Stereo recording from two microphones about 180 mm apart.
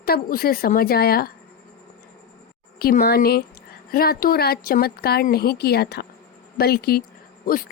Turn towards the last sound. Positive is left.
turn(degrees=50)  # may be behind; listen again after turning